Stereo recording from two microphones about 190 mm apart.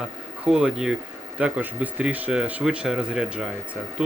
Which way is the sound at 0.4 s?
5° right (ahead or behind).